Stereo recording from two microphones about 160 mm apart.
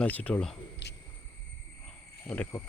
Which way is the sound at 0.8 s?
90° left.